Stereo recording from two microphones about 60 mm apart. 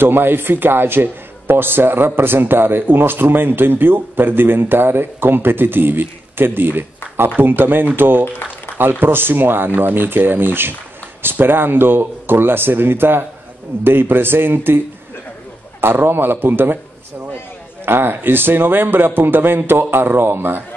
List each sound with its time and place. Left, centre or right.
0.0 s a man's voice: right
15.8 s a man's voice: right
17.8 s a man's voice: right